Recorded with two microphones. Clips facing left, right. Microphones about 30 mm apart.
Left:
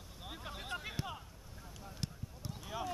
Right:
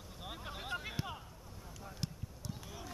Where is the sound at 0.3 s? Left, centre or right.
Centre.